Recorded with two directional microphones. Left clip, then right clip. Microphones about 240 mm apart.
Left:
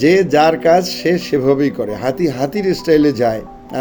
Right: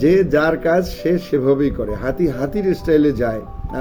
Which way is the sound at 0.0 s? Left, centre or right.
Centre.